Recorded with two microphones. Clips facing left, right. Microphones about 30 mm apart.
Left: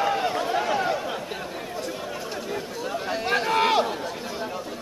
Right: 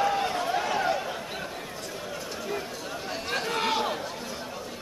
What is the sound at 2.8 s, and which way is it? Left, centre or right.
Chatter, centre.